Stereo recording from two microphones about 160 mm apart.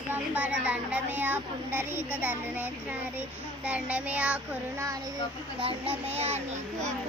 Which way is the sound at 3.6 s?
10° right (ahead or behind).